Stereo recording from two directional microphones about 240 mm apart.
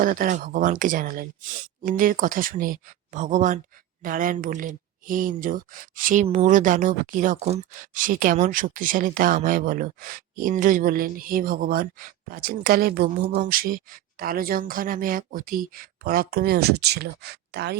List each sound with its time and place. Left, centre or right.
0.0 s speech: right